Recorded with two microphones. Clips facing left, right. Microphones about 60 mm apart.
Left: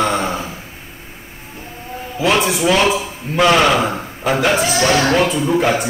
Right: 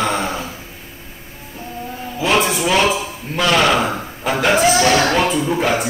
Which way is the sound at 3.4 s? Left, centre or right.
Centre.